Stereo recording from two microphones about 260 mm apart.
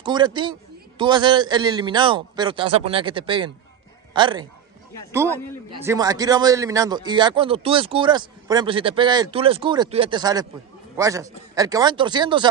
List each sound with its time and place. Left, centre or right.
0.0 s speech: centre